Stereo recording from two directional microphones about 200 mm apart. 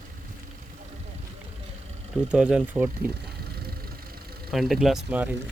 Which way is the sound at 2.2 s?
5° right (ahead or behind).